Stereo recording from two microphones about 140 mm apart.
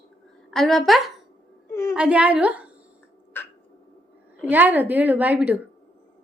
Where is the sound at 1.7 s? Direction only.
20° left (ahead or behind).